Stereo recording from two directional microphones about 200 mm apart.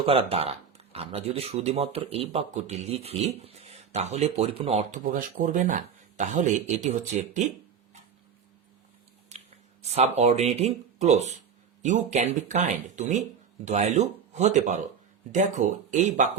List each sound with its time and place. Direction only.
0.0 s speech: 30° right (ahead or behind)
9.8 s speech: 30° right (ahead or behind)